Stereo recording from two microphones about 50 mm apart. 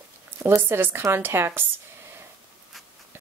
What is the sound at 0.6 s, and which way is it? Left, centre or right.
A woman's voice, right.